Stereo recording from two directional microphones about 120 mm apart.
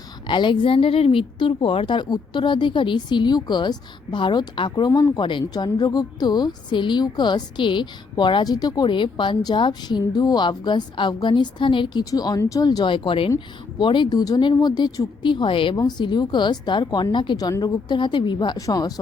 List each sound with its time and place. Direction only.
0.3 s a woman's voice: 40° left (ahead or behind)
4.9 s a woman's voice: 30° left (ahead or behind)
12.1 s a woman's voice: 30° left (ahead or behind)